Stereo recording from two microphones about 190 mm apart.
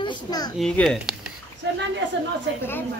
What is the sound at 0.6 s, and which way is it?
Speech, centre (ahead or behind).